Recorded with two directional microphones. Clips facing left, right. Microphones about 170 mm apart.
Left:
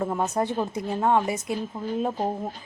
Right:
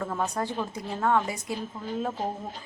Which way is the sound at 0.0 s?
20° left (ahead or behind).